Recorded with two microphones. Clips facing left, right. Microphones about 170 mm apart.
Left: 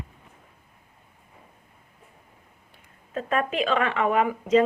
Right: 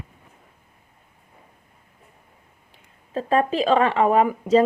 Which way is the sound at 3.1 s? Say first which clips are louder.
Right 5 dB; 30° right (ahead or behind).